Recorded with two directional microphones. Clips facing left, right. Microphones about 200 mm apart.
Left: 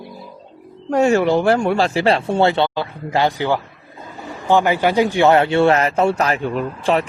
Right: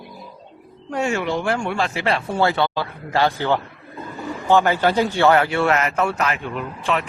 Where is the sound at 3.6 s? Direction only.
60° right (ahead or behind).